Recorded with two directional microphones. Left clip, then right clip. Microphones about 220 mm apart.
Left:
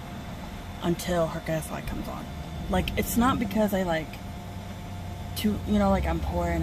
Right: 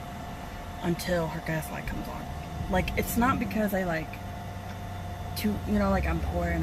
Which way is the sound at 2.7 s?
15° left (ahead or behind).